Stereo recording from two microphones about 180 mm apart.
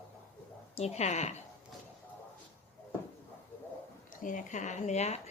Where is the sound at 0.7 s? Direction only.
35° left (ahead or behind).